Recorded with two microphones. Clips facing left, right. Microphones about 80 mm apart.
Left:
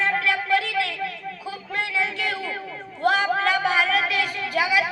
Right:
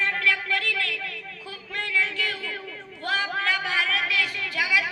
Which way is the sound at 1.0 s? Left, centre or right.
Centre.